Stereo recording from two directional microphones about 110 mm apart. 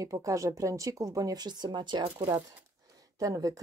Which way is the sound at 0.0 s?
30° right (ahead or behind).